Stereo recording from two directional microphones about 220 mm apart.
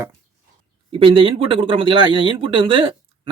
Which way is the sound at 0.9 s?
25° right (ahead or behind).